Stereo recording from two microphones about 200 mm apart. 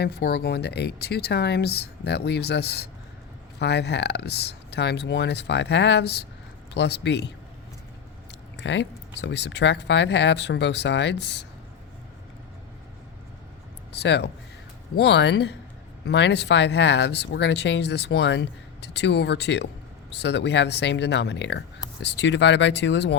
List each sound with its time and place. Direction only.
0.0 s speech: 55° left (ahead or behind)
8.5 s speech: 60° left (ahead or behind)
13.9 s speech: 55° left (ahead or behind)